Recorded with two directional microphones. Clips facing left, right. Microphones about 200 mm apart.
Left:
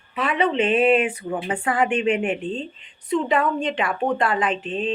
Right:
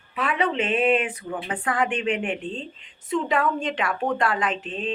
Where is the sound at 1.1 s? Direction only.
25° left (ahead or behind).